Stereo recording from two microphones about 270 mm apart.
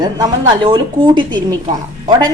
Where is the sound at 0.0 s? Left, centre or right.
Centre.